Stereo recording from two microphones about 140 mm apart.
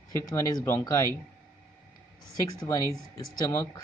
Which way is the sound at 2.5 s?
25° left (ahead or behind).